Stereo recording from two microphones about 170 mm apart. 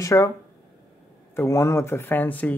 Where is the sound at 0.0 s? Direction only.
20° left (ahead or behind).